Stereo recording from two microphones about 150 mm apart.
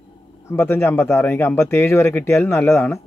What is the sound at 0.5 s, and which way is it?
A man's voice, 15° left (ahead or behind).